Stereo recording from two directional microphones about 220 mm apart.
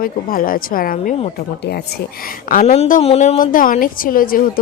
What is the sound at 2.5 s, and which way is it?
A woman's voice, 35° left (ahead or behind).